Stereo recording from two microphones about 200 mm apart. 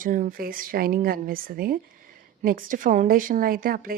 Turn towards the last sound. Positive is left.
turn(degrees=-45)  # may be behind; listen again after turning